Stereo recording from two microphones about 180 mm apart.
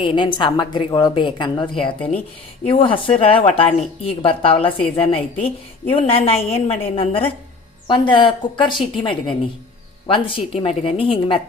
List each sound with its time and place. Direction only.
0.0 s a woman's voice: 25° left (ahead or behind)